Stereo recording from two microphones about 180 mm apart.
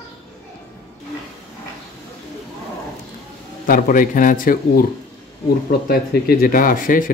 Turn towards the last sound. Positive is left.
turn(degrees=50)  # may be behind; listen again after turning